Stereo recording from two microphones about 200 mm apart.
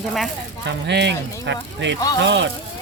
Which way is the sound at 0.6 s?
60° right (ahead or behind).